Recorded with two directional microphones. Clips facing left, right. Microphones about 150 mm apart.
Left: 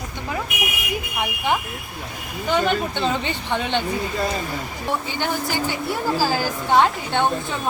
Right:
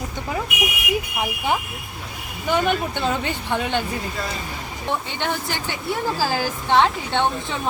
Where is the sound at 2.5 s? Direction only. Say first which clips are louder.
Even; 10° right (ahead or behind).